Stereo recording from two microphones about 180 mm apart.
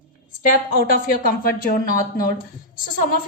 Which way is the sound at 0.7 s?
55° left (ahead or behind).